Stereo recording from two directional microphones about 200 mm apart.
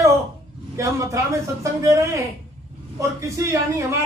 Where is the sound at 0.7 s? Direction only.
15° right (ahead or behind).